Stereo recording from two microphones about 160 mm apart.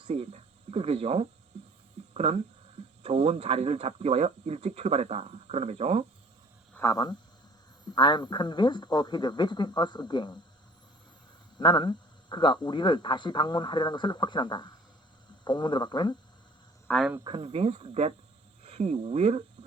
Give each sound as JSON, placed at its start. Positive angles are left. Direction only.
{"t": 0.1, "sound": "speech", "side_deg": -40}
{"t": 6.7, "sound": "speech", "side_deg": 20}
{"t": 11.6, "sound": "speech", "side_deg": 30}
{"t": 16.9, "sound": "speech", "side_deg": 10}
{"t": 17.2, "sound": "speech", "side_deg": -30}